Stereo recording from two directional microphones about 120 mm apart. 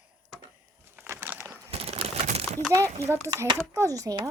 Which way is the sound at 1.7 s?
55° right (ahead or behind).